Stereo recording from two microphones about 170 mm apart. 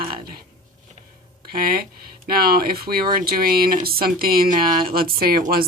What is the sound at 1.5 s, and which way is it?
Speech, 60° right (ahead or behind).